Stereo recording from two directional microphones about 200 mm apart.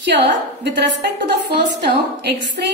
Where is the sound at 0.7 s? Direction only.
60° right (ahead or behind).